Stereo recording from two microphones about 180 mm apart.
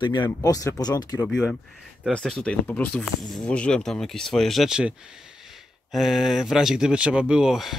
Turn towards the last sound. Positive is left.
turn(degrees=0)  # may be behind; listen again after turning